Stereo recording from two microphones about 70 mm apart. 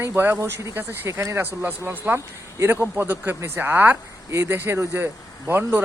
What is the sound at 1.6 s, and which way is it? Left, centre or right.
Speech, right.